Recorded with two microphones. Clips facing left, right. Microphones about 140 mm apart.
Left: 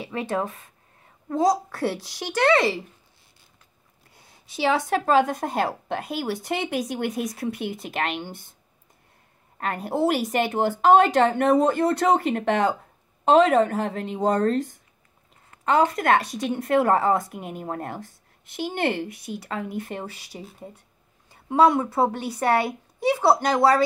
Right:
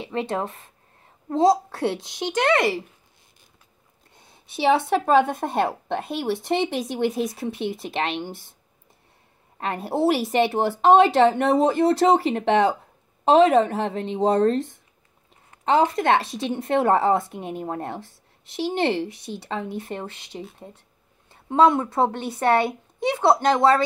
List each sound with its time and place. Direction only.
0.0 s speech: 25° right (ahead or behind)
4.1 s a sound: 25° right (ahead or behind)
4.6 s speech: 25° right (ahead or behind)
9.6 s speech: 25° right (ahead or behind)
20.2 s speech: 5° left (ahead or behind)
21.5 s speech: 25° right (ahead or behind)
22.6 s a sound: 5° left (ahead or behind)
23.1 s speech: 10° left (ahead or behind)